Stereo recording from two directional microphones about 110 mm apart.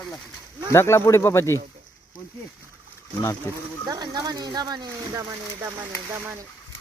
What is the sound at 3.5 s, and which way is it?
Speech, 25° left (ahead or behind).